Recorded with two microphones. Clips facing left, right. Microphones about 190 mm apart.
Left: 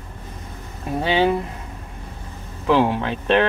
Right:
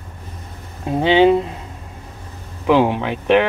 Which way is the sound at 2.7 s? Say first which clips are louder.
Right 3 dB; 15° right (ahead or behind).